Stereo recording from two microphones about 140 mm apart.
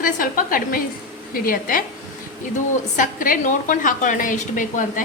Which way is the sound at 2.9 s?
80° left.